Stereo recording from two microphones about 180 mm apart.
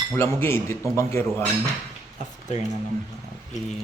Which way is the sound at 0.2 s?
15° left (ahead or behind).